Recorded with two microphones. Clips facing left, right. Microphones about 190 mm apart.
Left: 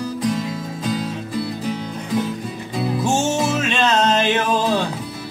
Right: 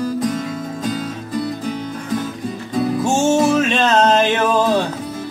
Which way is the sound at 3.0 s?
45° right (ahead or behind).